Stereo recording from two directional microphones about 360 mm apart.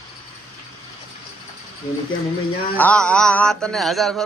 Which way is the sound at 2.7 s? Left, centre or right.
Centre.